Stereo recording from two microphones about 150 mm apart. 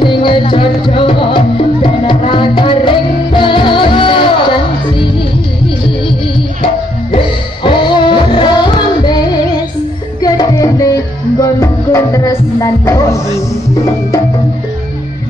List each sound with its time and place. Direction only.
0.0 s music: 30° left (ahead or behind)
6.6 s music: 35° left (ahead or behind)